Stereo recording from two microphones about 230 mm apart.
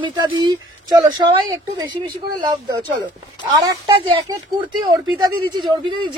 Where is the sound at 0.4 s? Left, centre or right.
Centre.